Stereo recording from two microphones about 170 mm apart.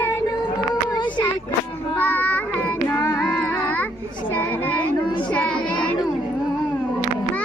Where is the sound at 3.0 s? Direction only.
20° left (ahead or behind).